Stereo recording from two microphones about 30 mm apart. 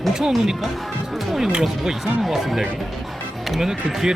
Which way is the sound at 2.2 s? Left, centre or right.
Centre.